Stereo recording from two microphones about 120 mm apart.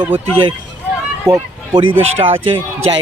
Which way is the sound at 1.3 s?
25° right (ahead or behind).